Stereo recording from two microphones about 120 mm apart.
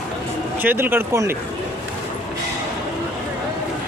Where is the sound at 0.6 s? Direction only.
15° right (ahead or behind).